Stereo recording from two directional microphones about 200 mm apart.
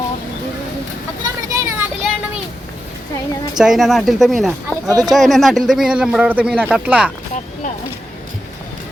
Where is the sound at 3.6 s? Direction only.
Centre (ahead or behind).